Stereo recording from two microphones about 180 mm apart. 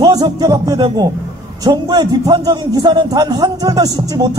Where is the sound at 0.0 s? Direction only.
20° right (ahead or behind).